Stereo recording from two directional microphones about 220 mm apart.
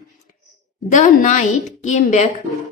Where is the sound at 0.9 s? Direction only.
35° left (ahead or behind).